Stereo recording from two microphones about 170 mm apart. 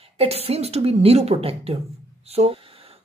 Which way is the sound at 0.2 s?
35° right (ahead or behind).